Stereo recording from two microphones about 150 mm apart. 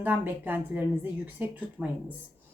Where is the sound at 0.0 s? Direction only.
10° right (ahead or behind).